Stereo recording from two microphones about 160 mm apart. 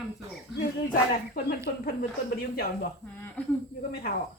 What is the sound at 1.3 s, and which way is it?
Speech, 70° left (ahead or behind).